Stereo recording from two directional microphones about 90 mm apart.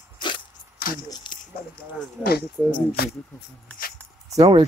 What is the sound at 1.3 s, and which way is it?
Squish, 60° left (ahead or behind).